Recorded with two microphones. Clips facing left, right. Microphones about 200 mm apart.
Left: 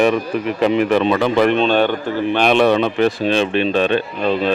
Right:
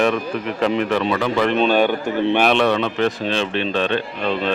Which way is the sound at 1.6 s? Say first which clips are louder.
Left 1 dB; 10° right (ahead or behind).